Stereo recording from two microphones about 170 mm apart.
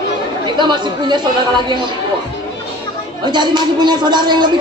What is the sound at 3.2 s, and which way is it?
Speech, 25° right (ahead or behind).